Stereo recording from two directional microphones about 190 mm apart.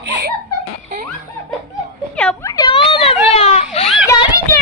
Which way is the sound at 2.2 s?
5° left (ahead or behind).